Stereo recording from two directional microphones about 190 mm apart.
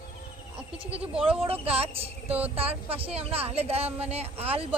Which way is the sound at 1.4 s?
30° right (ahead or behind).